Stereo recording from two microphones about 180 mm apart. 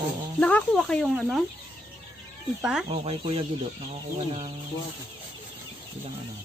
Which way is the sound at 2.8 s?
35° right (ahead or behind).